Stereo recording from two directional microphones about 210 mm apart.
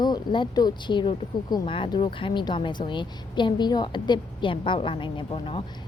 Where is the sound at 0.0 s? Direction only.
20° left (ahead or behind).